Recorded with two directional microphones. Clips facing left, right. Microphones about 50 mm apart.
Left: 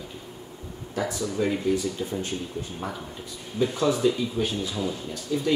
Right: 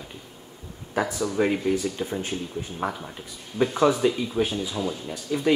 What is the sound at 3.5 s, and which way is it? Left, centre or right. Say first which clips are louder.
Speech: right 3 dB; right.